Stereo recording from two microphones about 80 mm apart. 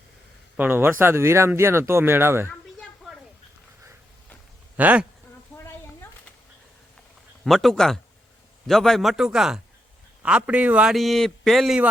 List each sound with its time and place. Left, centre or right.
0.5 s speech: right
4.8 s speech: right
7.4 s a man's voice: centre
10.8 s a man's voice: centre